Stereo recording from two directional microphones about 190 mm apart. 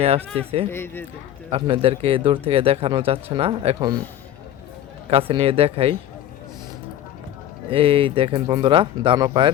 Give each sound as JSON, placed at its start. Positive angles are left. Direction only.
{"t": 0.7, "sound": "speech", "side_deg": 10}
{"t": 1.5, "sound": "speech", "side_deg": -30}
{"t": 5.1, "sound": "speech", "side_deg": -30}
{"t": 7.7, "sound": "speech", "side_deg": -30}